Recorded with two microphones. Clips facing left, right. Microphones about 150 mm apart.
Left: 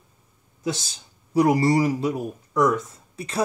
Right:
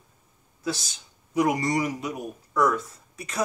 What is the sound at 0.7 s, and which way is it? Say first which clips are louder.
Speech: left 2 dB; 25° left (ahead or behind).